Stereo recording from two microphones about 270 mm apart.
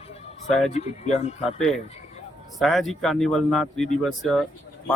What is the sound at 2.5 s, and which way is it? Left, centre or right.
Speech, centre.